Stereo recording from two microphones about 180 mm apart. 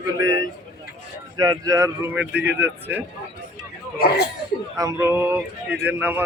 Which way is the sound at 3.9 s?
65° left (ahead or behind).